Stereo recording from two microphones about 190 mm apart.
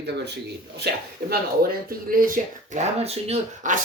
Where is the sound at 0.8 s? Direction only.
55° right (ahead or behind).